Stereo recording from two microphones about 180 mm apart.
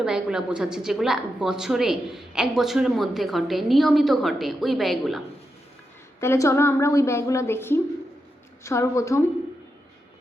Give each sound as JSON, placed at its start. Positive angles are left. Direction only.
{"t": 0.0, "sound": "a woman's voice", "side_deg": -5}
{"t": 6.1, "sound": "a woman's voice", "side_deg": 15}